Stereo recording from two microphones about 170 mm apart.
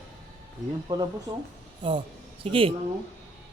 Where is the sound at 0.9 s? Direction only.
20° right (ahead or behind).